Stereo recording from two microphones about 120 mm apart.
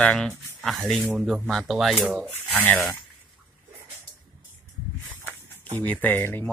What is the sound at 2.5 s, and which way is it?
Speech, 15° left (ahead or behind).